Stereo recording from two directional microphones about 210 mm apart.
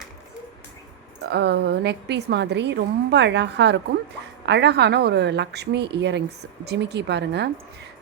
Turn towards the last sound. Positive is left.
turn(degrees=-55)  # may be behind; listen again after turning